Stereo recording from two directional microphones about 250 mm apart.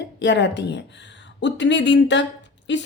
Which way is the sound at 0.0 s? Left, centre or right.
Left.